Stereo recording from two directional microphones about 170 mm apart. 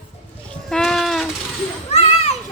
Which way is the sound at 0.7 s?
5° left (ahead or behind).